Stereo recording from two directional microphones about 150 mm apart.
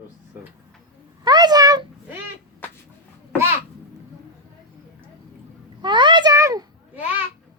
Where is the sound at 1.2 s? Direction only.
25° right (ahead or behind).